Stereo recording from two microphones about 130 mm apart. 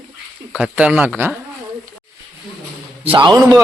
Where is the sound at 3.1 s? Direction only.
35° right (ahead or behind).